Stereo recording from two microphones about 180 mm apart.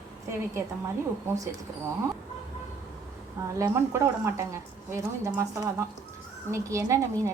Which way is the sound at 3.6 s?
15° right (ahead or behind).